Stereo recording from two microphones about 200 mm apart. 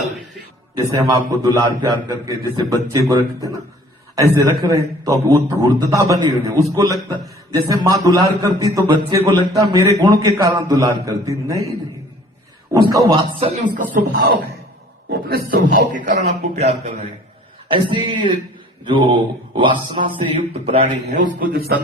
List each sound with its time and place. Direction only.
1.3 s a man's voice: 20° right (ahead or behind)
12.7 s music: 15° right (ahead or behind)
13.6 s a man's voice: 45° right (ahead or behind)
17.7 s music: 25° right (ahead or behind)
21.3 s a man's voice: 45° right (ahead or behind)